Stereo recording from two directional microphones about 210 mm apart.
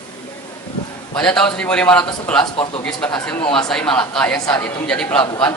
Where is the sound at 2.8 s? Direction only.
5° left (ahead or behind).